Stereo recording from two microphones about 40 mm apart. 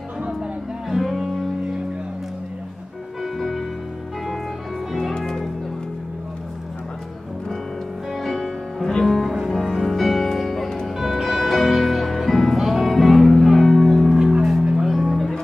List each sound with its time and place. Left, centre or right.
0.8 s music: centre
3.3 s music: centre
5.1 s music: centre
8.2 s music: centre
11.0 s music: centre
14.1 s music: centre
14.9 s music: centre